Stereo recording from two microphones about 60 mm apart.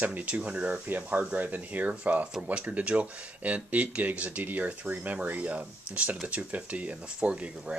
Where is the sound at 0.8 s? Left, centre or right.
Right.